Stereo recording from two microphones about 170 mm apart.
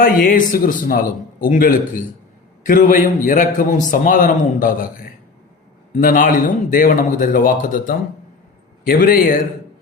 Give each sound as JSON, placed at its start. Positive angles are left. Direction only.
{"t": 0.0, "sound": "a man's voice", "side_deg": 50}